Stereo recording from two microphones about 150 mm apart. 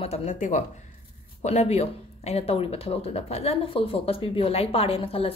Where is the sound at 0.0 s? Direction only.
45° left (ahead or behind).